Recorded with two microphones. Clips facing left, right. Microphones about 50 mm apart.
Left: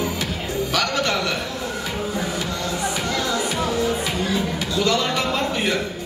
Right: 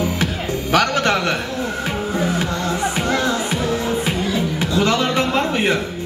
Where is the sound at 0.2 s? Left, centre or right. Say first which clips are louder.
Right 3 dB; right.